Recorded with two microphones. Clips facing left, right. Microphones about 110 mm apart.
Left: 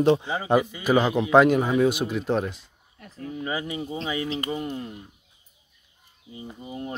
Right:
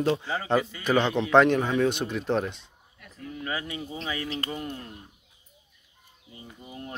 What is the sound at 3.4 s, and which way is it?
Speech, 15° left (ahead or behind).